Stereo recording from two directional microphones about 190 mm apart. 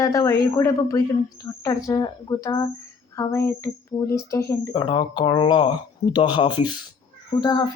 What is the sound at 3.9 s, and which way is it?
Speech, 30° left (ahead or behind).